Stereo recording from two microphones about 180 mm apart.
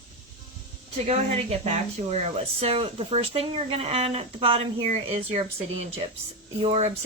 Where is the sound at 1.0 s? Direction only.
35° right (ahead or behind).